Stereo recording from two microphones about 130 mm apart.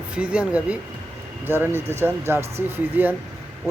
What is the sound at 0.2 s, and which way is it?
A man's voice, 10° right (ahead or behind).